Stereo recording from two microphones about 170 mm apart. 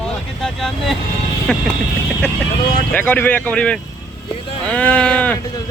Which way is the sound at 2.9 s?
10° left (ahead or behind).